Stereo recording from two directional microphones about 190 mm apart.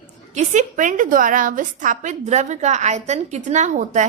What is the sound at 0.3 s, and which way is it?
A woman's voice, 40° right (ahead or behind).